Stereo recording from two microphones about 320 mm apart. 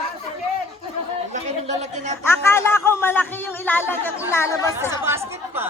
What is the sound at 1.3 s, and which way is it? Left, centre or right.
Speech, right.